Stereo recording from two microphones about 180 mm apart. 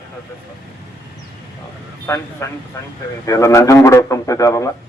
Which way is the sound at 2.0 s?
15° left (ahead or behind).